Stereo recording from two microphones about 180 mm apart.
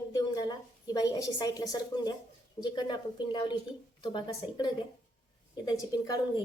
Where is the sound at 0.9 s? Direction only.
20° left (ahead or behind).